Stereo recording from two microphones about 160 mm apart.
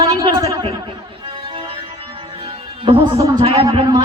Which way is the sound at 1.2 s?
30° right (ahead or behind).